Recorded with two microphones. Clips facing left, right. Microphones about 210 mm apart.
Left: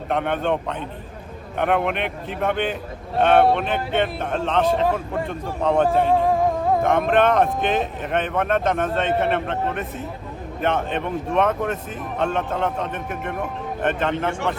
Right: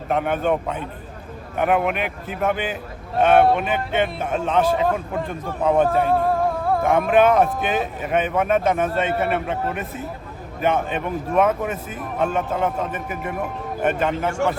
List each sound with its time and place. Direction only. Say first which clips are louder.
0.1 s speech: right 1 dB; 5° right (ahead or behind)
6.2 s music: left 1 dB; 15° left (ahead or behind)
6.8 s a man's voice: right 3 dB; 5° right (ahead or behind)